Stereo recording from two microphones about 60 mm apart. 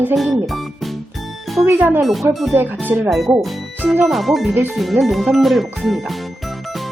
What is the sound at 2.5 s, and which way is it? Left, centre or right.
Speech, right.